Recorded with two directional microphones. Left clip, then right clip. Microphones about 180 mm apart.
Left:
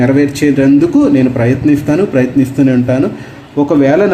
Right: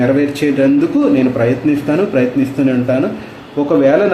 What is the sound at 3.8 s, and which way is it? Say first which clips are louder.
Speech: left 1 dB; 50° left (ahead or behind).